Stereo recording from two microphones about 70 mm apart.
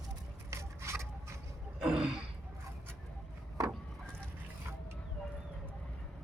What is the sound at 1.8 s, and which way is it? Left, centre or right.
Throat clearing, centre.